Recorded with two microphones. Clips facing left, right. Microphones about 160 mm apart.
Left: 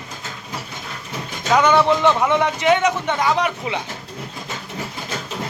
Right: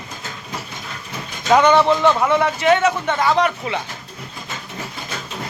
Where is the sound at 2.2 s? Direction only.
15° left (ahead or behind).